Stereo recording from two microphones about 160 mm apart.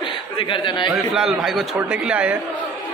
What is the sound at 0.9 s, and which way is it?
A man's voice, 5° right (ahead or behind).